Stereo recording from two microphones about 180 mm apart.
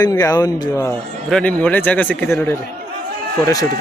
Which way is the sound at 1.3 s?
5° left (ahead or behind).